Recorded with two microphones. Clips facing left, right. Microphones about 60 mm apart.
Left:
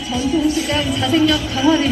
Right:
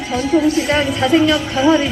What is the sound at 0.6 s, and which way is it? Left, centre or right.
A woman's voice, right.